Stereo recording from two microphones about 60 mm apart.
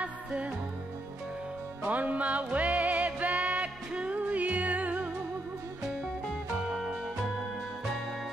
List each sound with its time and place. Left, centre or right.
0.0 s music: right
1.9 s music: right